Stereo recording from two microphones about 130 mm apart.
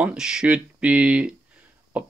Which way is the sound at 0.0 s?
5° right (ahead or behind).